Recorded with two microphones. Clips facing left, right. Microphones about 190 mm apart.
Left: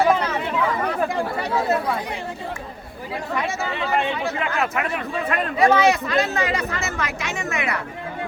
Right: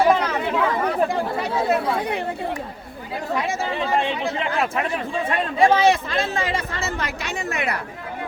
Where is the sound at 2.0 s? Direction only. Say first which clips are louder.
Right 5 dB; 60° right (ahead or behind).